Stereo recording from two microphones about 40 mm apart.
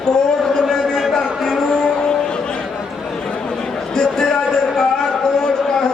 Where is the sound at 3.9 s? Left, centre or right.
Centre.